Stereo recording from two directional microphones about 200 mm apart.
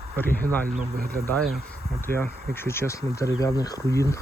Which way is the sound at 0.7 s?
45° right (ahead or behind).